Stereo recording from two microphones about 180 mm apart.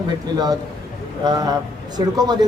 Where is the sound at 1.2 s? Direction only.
20° right (ahead or behind).